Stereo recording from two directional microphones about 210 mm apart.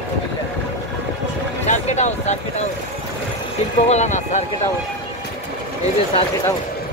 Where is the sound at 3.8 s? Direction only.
35° left (ahead or behind).